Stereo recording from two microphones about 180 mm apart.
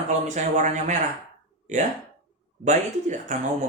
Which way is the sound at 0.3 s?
40° right (ahead or behind).